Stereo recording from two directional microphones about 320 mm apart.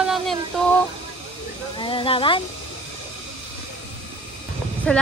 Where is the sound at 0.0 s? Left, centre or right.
Centre.